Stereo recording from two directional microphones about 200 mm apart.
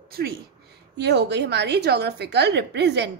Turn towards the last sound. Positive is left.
turn(degrees=-60)  # may be behind; listen again after turning